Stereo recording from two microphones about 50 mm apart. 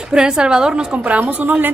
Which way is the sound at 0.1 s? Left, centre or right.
Centre.